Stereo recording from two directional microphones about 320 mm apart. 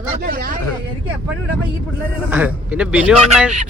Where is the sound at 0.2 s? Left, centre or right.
Right.